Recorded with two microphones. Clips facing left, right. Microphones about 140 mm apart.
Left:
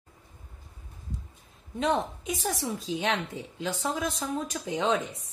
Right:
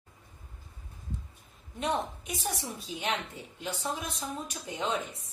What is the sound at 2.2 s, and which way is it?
A woman's voice, 90° left.